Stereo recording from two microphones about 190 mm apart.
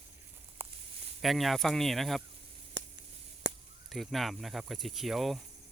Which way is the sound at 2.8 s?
65° right (ahead or behind).